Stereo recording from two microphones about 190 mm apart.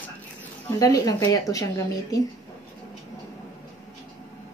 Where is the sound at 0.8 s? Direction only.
20° left (ahead or behind).